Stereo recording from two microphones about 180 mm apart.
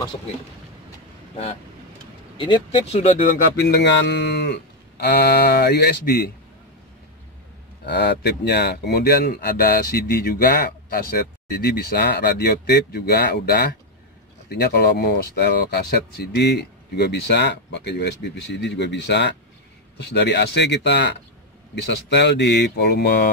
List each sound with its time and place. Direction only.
2.3 s speech: 30° left (ahead or behind)
3.6 s speech: 70° left (ahead or behind)
7.8 s speech: 70° left (ahead or behind)